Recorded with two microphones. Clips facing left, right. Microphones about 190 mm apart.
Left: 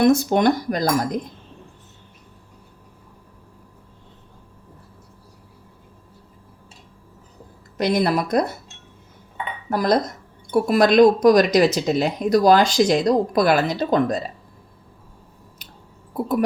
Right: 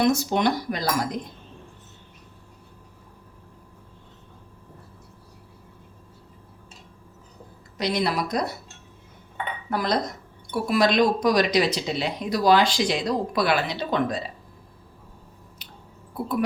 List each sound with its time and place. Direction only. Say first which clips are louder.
0.0 s speech: left 5 dB; 55° left (ahead or behind)
7.8 s speech: left 5 dB; 50° left (ahead or behind)
9.6 s speech: left 6 dB; 45° left (ahead or behind)